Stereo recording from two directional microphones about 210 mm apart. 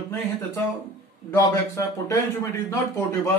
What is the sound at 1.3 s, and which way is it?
Speech, 15° left (ahead or behind).